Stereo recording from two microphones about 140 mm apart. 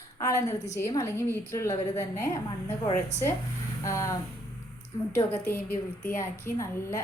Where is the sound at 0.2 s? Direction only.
20° left (ahead or behind).